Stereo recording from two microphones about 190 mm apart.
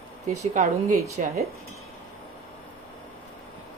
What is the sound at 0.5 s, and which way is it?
Speech, 40° right (ahead or behind).